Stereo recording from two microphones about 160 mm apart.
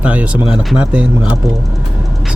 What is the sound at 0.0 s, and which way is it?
Speech, 10° right (ahead or behind).